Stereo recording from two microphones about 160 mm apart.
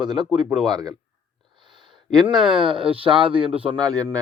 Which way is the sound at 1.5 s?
30° right (ahead or behind).